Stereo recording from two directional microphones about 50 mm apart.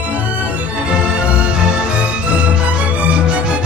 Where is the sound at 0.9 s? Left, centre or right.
Right.